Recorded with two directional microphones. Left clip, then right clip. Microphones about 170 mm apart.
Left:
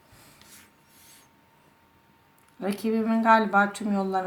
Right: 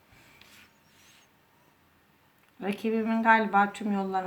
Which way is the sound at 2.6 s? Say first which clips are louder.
Left 2 dB; 40° left (ahead or behind).